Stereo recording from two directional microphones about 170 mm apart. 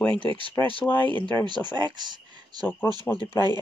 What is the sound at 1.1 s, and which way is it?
Speech, 10° left (ahead or behind).